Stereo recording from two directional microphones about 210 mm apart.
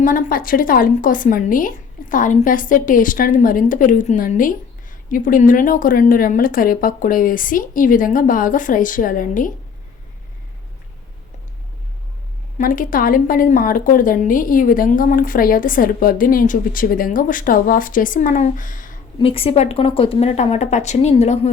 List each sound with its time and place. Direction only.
0.0 s a woman's voice: 40° left (ahead or behind)
12.5 s a woman's voice: 40° left (ahead or behind)
19.3 s a woman's voice: 25° left (ahead or behind)